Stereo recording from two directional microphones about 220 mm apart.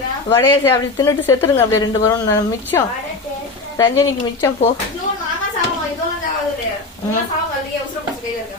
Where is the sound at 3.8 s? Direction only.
15° left (ahead or behind).